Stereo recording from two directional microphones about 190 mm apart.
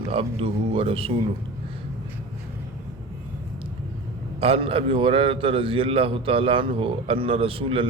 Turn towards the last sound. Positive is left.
turn(degrees=-30)  # may be behind; listen again after turning